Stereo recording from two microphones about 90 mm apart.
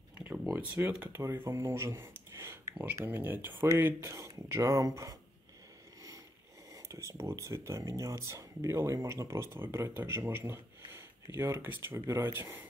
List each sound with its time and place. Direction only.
0.2 s a sound: 15° right (ahead or behind)
0.6 s speech: 25° right (ahead or behind)
1.2 s speech: 30° right (ahead or behind)
6.7 s speech: 35° right (ahead or behind)